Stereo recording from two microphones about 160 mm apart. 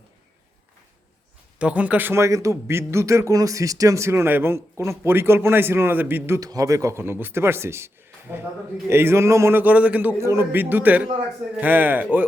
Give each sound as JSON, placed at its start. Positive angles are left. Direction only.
{"t": 1.5, "sound": "speech", "side_deg": -10}
{"t": 8.9, "sound": "speech", "side_deg": -15}